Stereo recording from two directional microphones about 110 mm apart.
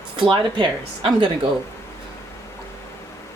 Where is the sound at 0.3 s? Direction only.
45° right (ahead or behind).